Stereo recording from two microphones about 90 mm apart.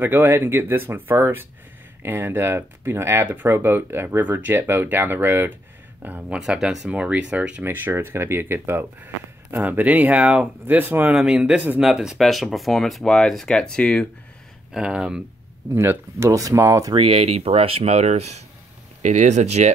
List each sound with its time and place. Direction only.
0.0 s speech: 25° right (ahead or behind)
7.6 s speech: 25° right (ahead or behind)
11.1 s speech: 5° right (ahead or behind); by 14.0 s 10° left (ahead or behind)
14.7 s speech: 10° right (ahead or behind)
15.7 s speech: 30° right (ahead or behind)
16.9 s speech: 85° right